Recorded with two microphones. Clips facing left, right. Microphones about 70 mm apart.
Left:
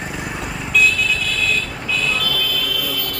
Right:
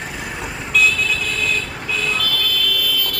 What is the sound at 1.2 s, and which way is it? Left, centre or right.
Vehicle, centre.